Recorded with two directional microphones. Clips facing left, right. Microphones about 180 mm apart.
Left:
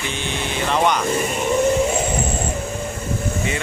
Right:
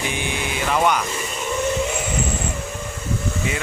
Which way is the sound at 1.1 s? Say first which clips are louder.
Left 6 dB; 50° left (ahead or behind).